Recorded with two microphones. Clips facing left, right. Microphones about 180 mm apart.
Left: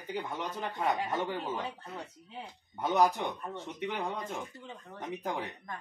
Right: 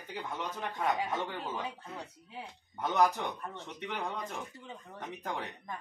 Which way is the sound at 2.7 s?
15° left (ahead or behind).